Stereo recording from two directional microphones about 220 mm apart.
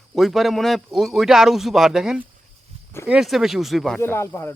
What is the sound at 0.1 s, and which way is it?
Speech, centre (ahead or behind).